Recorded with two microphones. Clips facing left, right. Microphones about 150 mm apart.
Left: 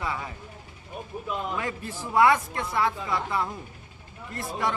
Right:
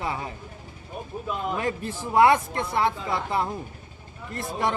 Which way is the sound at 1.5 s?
25° right (ahead or behind).